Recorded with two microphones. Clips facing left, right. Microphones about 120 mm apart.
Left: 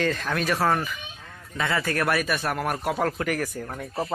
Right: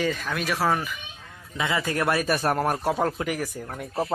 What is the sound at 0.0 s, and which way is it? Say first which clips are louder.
Speech: left 1 dB; 5° right (ahead or behind).